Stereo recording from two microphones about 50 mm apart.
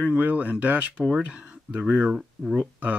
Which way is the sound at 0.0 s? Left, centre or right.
Right.